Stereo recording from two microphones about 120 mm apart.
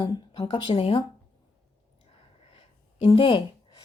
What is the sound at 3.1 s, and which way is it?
Speech, 45° left (ahead or behind).